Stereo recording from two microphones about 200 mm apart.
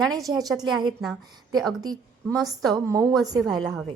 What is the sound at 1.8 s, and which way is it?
A woman's voice, 20° right (ahead or behind).